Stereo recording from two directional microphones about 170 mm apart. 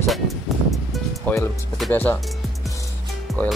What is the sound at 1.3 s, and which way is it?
Speech, 10° left (ahead or behind).